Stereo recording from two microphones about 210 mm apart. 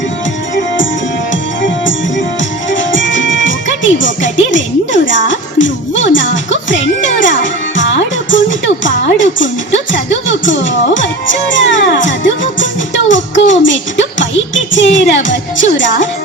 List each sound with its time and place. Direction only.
1.3 s music: 65° left (ahead or behind)
9.9 s speech: 60° left (ahead or behind)